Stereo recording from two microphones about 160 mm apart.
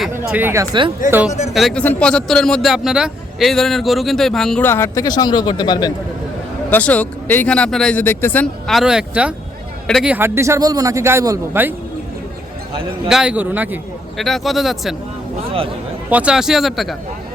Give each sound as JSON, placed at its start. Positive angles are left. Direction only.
{"t": 0.3, "sound": "a man's voice", "side_deg": -10}
{"t": 1.5, "sound": "a man's voice", "side_deg": 0}
{"t": 4.6, "sound": "speech", "side_deg": 15}
{"t": 6.7, "sound": "a man's voice", "side_deg": 10}
{"t": 10.1, "sound": "a man's voice", "side_deg": -15}
{"t": 13.1, "sound": "a man's voice", "side_deg": -5}
{"t": 14.2, "sound": "a man's voice", "side_deg": 0}
{"t": 16.0, "sound": "a man's voice", "side_deg": -10}